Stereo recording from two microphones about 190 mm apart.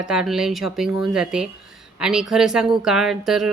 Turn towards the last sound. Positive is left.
turn(degrees=0)  # may be behind; listen again after turning